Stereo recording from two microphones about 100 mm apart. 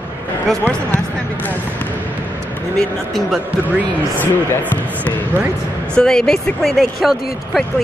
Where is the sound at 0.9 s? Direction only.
20° left (ahead or behind).